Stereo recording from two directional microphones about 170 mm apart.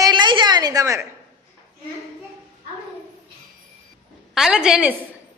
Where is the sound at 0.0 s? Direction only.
25° right (ahead or behind).